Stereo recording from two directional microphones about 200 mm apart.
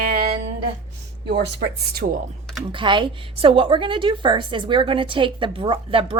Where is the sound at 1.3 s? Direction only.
55° right (ahead or behind).